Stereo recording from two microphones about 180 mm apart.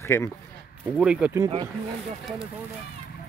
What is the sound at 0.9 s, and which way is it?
Speech, 5° right (ahead or behind).